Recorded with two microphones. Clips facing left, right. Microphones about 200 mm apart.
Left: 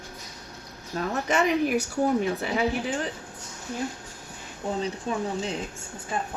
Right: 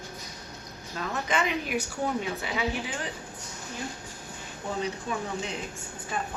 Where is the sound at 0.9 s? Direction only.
40° left (ahead or behind).